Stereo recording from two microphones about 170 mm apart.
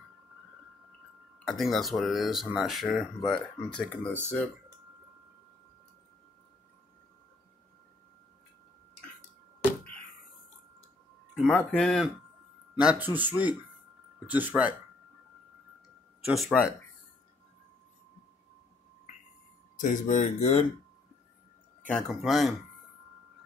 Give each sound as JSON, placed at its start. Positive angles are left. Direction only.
{"t": 1.5, "sound": "speech", "side_deg": 0}
{"t": 11.4, "sound": "speech", "side_deg": 10}
{"t": 12.7, "sound": "speech", "side_deg": -10}
{"t": 16.3, "sound": "speech", "side_deg": 0}
{"t": 19.8, "sound": "speech", "side_deg": 50}
{"t": 21.8, "sound": "speech", "side_deg": 5}